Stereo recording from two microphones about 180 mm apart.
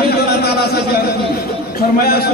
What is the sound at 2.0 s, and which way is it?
Speech, 60° left (ahead or behind).